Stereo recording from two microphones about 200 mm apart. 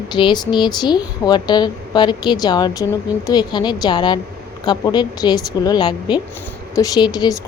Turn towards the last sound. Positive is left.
turn(degrees=20)  # may be behind; listen again after turning